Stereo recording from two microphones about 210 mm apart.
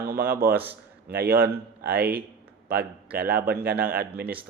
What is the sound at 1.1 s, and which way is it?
Speech, 45° right (ahead or behind).